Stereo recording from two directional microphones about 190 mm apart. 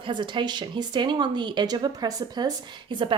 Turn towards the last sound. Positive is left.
turn(degrees=-25)  # may be behind; listen again after turning